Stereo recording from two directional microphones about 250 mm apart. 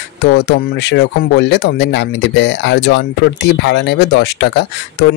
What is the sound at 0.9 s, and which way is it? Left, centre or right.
Speech, left.